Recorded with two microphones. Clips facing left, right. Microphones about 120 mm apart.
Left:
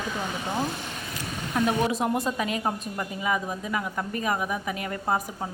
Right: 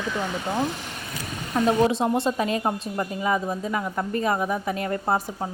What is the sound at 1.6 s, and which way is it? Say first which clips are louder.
A woman's voice: right 5 dB; 25° right (ahead or behind).